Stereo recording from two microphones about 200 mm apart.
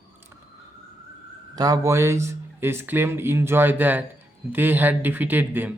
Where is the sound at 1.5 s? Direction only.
20° right (ahead or behind).